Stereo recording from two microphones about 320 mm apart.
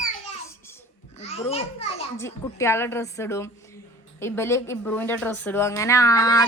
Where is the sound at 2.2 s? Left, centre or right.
Centre.